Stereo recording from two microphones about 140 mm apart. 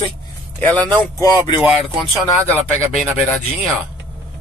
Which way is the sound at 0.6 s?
10° left (ahead or behind).